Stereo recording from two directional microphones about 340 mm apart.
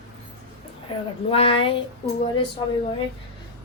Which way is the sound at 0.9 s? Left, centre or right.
Centre.